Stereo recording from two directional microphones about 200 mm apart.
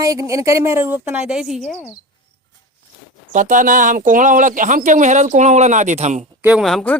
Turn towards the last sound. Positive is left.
turn(degrees=0)  # may be behind; listen again after turning